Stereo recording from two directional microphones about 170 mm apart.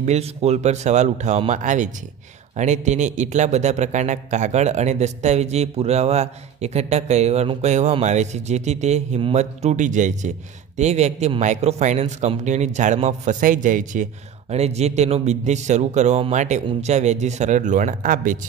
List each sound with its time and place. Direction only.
0.0 s a man's voice: 40° right (ahead or behind)
14.5 s a man's voice: 40° right (ahead or behind)